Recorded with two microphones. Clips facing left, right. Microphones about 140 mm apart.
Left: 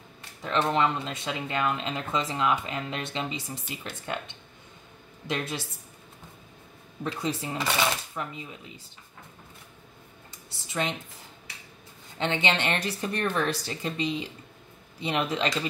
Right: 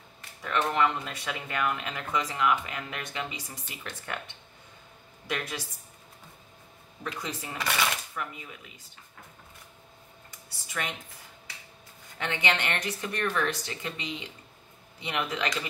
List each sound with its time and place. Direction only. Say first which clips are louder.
0.4 s speech: left 2 dB; 25° left (ahead or behind)
5.2 s speech: left 3 dB; 25° left (ahead or behind)
7.0 s speech: left 6 dB; 30° left (ahead or behind)
10.7 s speech: left 5 dB; 25° left (ahead or behind)
12.2 s speech: left 3 dB; 25° left (ahead or behind)